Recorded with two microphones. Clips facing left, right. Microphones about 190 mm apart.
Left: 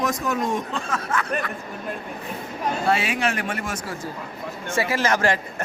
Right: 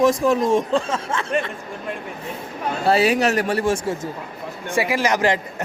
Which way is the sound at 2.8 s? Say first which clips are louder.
Right 7 dB; 35° right (ahead or behind).